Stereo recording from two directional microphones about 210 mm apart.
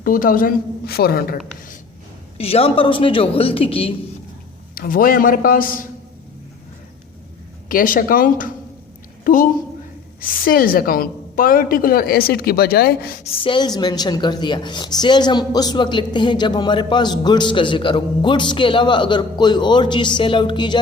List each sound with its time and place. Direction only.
0.0 s a woman's voice: 40° left (ahead or behind)
2.4 s a woman's voice: 30° left (ahead or behind)
4.7 s a man's voice: 45° left (ahead or behind)
7.7 s a man's voice: 40° left (ahead or behind)
13.3 s a woman's voice: 25° left (ahead or behind)